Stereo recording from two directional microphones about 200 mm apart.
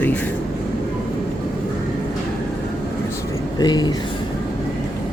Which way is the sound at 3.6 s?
20° left (ahead or behind).